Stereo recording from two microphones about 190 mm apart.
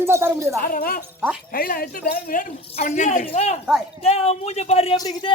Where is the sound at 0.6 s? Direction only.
50° left (ahead or behind); by 5.0 s 30° left (ahead or behind).